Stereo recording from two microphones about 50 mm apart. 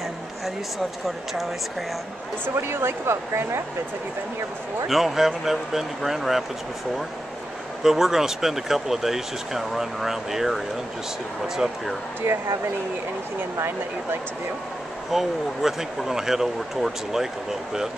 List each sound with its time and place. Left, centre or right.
1.0 s speech: centre
2.4 s speech: right
4.8 s speech: centre
7.8 s speech: centre
12.2 s speech: right
15.0 s speech: centre